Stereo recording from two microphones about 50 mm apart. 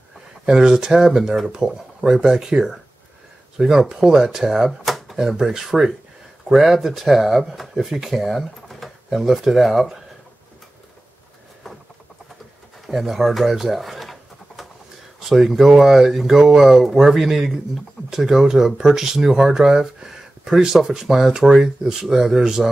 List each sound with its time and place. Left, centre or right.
0.5 s speech: centre
12.8 s speech: centre
15.1 s speech: centre